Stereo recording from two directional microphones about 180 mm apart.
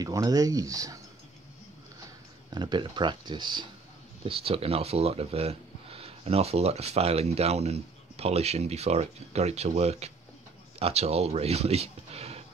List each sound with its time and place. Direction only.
0.0 s speech: 20° right (ahead or behind)
2.5 s speech: 25° right (ahead or behind)